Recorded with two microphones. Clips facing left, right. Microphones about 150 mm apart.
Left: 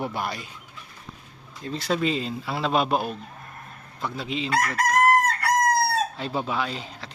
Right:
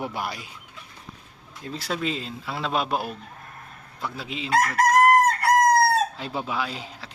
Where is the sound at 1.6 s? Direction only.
5° right (ahead or behind).